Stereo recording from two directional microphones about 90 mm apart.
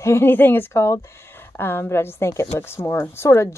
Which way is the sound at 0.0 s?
30° left (ahead or behind).